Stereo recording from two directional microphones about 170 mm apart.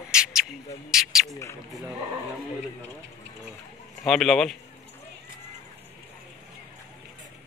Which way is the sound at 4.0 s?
Centre (ahead or behind).